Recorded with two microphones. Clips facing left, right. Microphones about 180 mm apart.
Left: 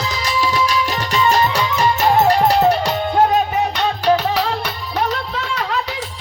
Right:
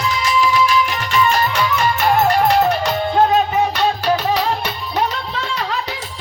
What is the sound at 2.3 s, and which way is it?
Music, 35° left (ahead or behind).